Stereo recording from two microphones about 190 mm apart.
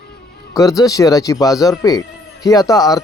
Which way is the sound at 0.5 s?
20° left (ahead or behind).